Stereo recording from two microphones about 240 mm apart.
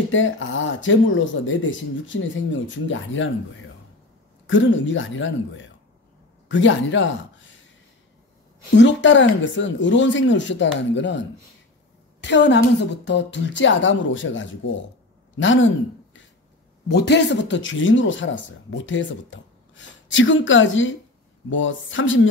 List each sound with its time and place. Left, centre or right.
0.1 s a man's voice: left
8.7 s speech: left